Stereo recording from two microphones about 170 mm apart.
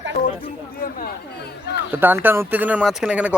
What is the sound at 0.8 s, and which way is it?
Speech, 55° left (ahead or behind).